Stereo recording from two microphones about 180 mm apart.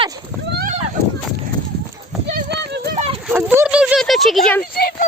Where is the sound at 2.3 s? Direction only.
60° right (ahead or behind).